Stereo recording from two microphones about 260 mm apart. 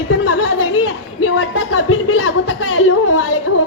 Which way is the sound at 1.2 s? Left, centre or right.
Left.